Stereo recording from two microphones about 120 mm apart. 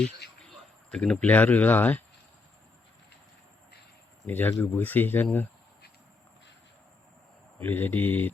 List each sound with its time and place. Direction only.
0.9 s speech: 5° left (ahead or behind)
4.3 s speech: 15° left (ahead or behind)
7.6 s speech: 15° left (ahead or behind)